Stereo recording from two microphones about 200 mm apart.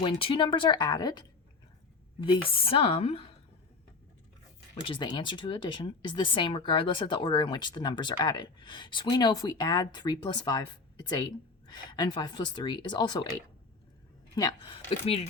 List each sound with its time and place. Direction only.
0.0 s speech: 25° left (ahead or behind)
2.2 s speech: 25° left (ahead or behind)
4.9 s speech: 25° left (ahead or behind)
14.3 s speech: 20° left (ahead or behind)